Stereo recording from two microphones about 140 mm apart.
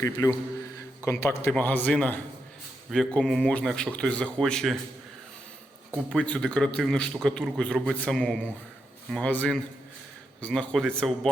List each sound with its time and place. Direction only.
0.0 s a man's voice: 25° left (ahead or behind); by 4.8 s centre (ahead or behind)
6.1 s a man's voice: 5° left (ahead or behind)